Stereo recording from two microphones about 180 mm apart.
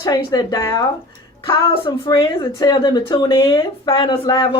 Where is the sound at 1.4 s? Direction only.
30° left (ahead or behind).